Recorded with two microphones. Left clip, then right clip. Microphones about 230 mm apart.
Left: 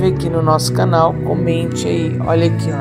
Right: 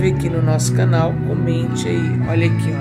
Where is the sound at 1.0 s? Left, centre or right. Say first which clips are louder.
Left 6 dB; left.